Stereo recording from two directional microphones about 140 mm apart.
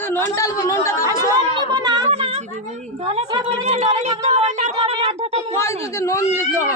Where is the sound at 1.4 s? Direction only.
30° right (ahead or behind).